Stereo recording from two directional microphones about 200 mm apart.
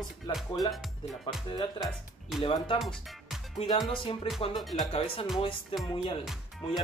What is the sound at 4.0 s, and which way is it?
Speech, 25° left (ahead or behind).